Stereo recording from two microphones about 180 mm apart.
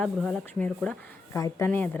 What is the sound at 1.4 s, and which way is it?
Speech, 20° left (ahead or behind).